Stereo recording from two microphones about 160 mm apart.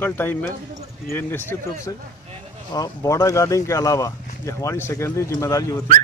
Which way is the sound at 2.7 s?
20° left (ahead or behind).